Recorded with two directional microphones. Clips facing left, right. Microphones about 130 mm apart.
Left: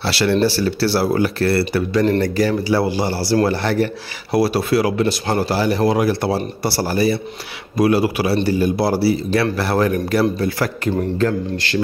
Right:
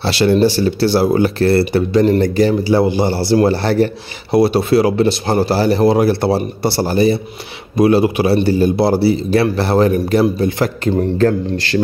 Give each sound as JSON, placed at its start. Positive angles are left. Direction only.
{"t": 0.0, "sound": "speech", "side_deg": -20}
{"t": 11.1, "sound": "a man's voice", "side_deg": -40}